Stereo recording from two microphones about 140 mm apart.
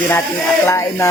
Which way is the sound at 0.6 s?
15° left (ahead or behind).